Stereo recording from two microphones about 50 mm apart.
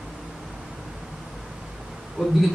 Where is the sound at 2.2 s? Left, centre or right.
Right.